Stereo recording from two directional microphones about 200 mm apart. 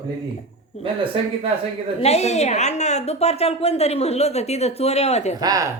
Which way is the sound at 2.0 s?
30° left (ahead or behind).